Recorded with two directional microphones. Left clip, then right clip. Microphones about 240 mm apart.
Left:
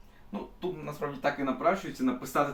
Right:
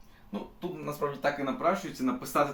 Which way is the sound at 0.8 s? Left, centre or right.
Centre.